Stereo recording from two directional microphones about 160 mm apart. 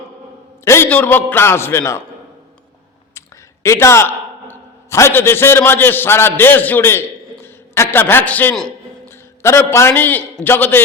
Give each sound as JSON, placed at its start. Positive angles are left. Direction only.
{"t": 0.6, "sound": "a man's voice", "side_deg": 15}
{"t": 3.2, "sound": "a man's voice", "side_deg": 15}